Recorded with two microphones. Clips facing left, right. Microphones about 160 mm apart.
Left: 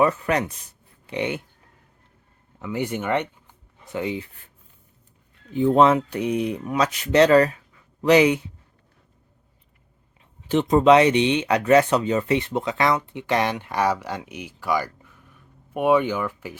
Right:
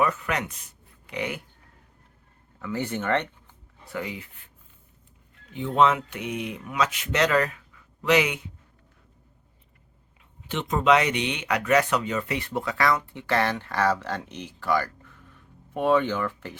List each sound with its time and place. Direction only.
0.0 s speech: 35° left (ahead or behind)
2.6 s speech: 15° left (ahead or behind)
3.9 s speech: 25° left (ahead or behind)
5.5 s speech: 40° left (ahead or behind)
10.5 s speech: 35° left (ahead or behind); by 16.6 s 10° left (ahead or behind)